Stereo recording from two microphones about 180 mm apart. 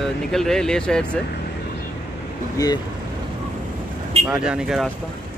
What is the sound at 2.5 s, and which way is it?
Speech, 20° left (ahead or behind).